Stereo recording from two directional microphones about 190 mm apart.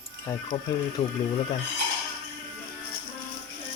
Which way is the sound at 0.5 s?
30° left (ahead or behind).